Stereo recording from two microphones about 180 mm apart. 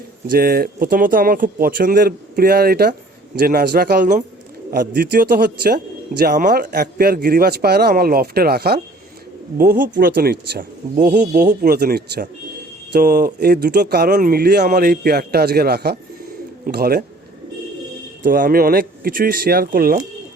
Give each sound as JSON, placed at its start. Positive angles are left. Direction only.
{"t": 0.3, "sound": "speech", "side_deg": -55}
{"t": 4.9, "sound": "speech", "side_deg": -65}
{"t": 18.2, "sound": "speech", "side_deg": -50}